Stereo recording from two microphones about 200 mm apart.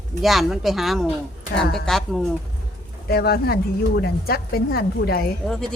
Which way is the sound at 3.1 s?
50° left (ahead or behind).